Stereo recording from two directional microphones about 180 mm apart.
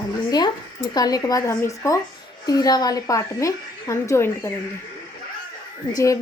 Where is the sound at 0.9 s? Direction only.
20° left (ahead or behind).